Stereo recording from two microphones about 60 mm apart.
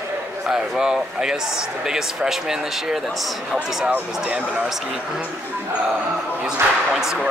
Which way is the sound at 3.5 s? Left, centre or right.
Right.